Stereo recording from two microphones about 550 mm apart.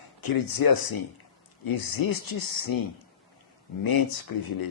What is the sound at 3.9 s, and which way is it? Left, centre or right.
Speech, left.